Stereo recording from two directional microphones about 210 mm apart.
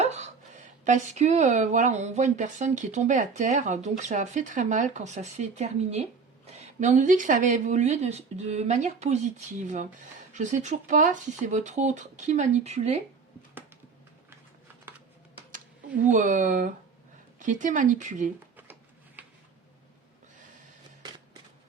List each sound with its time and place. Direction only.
0.0 s speech: 35° right (ahead or behind)
16.0 s speech: 35° right (ahead or behind)
18.5 s a sound: 10° right (ahead or behind)